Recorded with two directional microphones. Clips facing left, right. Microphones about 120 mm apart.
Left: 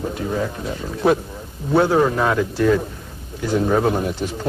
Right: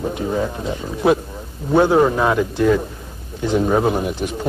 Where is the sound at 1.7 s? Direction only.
20° right (ahead or behind).